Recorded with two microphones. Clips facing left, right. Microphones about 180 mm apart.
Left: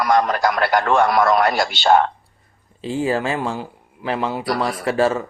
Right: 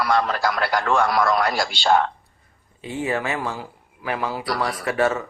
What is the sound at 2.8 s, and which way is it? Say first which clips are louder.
A man's voice: left 4 dB; 30° left (ahead or behind).